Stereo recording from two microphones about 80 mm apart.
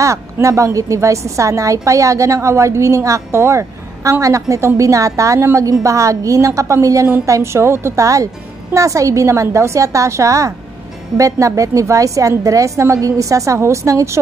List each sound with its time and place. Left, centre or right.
0.0 s a woman's voice: right